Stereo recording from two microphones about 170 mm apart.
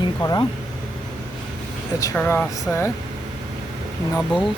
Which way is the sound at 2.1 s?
10° left (ahead or behind).